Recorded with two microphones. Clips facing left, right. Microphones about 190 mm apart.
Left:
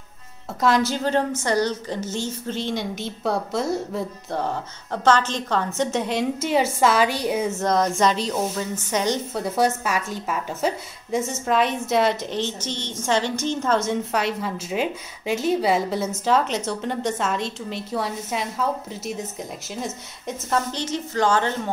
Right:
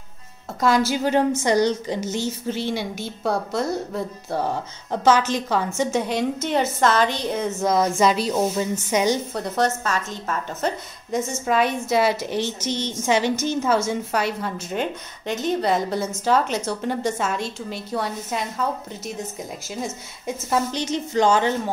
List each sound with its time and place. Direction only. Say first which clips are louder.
0.6 s a woman's voice: right 1 dB; centre (ahead or behind)
7.6 s a woman's voice: right 2 dB; 5° right (ahead or behind)
9.3 s a woman's voice: left 1 dB; 10° left (ahead or behind); by 21.5 s 15° right (ahead or behind)